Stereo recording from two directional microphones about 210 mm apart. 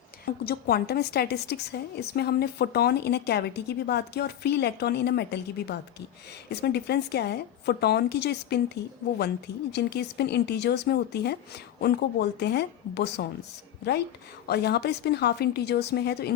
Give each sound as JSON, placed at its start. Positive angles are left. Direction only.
{"t": 0.4, "sound": "a woman's voice", "side_deg": 50}
{"t": 14.4, "sound": "a woman's voice", "side_deg": 50}